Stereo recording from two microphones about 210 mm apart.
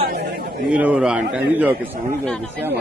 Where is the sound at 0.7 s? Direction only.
5° right (ahead or behind).